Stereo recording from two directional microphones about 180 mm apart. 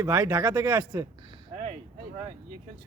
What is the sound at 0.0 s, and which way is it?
Speech, 20° right (ahead or behind).